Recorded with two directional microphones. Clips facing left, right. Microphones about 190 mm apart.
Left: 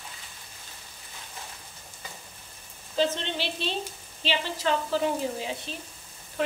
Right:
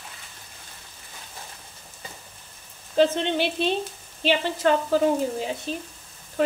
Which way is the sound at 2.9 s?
55° right (ahead or behind).